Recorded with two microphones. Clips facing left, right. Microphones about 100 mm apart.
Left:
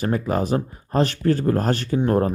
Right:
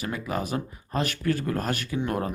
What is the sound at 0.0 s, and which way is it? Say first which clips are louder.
Speech: left 8 dB; 40° left (ahead or behind).